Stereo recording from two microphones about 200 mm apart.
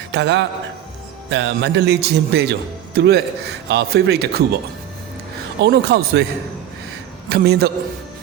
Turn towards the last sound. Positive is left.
turn(degrees=-50)  # may be behind; listen again after turning